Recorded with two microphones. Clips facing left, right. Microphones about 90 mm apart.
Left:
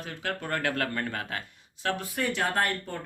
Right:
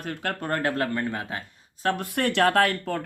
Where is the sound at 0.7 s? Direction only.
25° right (ahead or behind).